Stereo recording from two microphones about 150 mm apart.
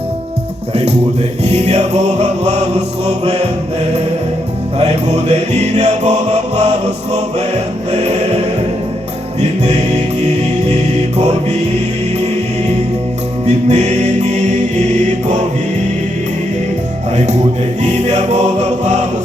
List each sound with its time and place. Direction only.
0.7 s music: 45° right (ahead or behind)
4.8 s music: 45° right (ahead or behind)
9.4 s music: 50° right (ahead or behind)
13.7 s music: 50° right (ahead or behind)
17.8 s music: 50° right (ahead or behind)